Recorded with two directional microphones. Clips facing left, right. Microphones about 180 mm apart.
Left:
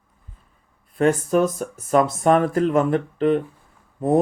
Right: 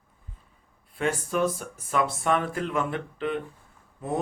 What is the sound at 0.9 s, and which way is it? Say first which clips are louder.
Speech: left 8 dB; 45° left (ahead or behind).